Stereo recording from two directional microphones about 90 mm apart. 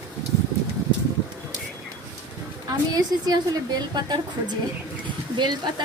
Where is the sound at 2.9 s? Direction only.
50° right (ahead or behind).